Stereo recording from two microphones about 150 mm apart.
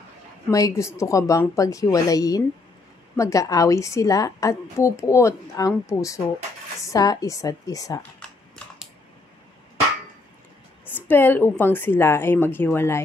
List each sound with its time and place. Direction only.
0.5 s a woman's voice: 20° left (ahead or behind)
10.9 s a woman's voice: 15° left (ahead or behind)